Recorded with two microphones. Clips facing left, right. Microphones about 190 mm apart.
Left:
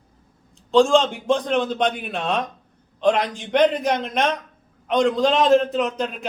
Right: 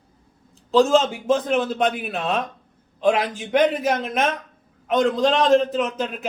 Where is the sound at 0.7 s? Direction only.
5° right (ahead or behind).